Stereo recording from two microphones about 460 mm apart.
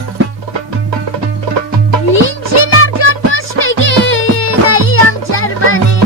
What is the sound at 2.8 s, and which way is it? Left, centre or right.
Music, left.